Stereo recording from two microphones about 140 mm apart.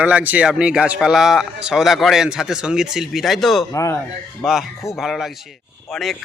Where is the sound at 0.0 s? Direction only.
10° right (ahead or behind).